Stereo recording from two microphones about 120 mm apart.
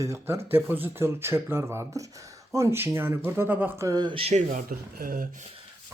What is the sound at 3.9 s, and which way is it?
Speech, 40° right (ahead or behind).